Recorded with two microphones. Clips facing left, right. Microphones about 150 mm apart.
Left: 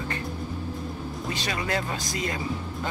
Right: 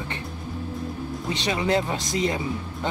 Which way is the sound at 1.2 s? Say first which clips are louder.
Right 6 dB; 20° right (ahead or behind).